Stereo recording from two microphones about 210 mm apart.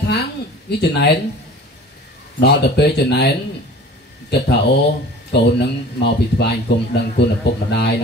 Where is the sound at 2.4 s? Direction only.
55° left (ahead or behind).